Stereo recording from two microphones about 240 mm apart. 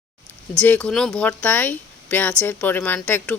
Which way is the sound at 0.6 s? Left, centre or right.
Centre.